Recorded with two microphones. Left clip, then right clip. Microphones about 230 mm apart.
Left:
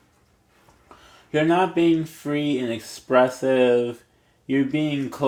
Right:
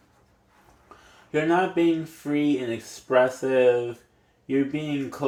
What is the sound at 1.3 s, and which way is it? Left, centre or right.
Speech, left.